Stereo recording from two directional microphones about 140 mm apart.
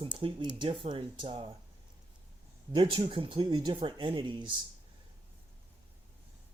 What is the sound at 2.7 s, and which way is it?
Speech, 35° right (ahead or behind).